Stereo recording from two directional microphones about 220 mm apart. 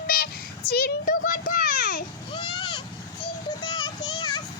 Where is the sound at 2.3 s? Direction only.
20° left (ahead or behind).